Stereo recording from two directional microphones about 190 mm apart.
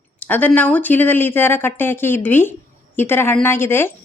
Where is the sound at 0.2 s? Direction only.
10° left (ahead or behind).